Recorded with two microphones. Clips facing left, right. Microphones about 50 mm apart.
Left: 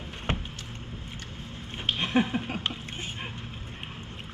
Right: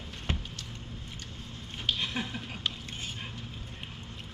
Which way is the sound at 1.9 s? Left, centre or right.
Left.